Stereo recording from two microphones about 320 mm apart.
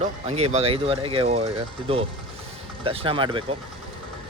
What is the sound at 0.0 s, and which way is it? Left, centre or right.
Speech, centre.